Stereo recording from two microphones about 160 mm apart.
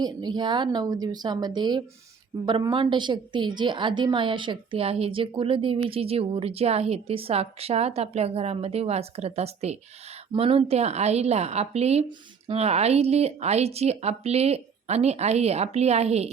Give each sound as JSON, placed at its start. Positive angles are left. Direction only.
{"t": 0.0, "sound": "a woman's voice", "side_deg": -25}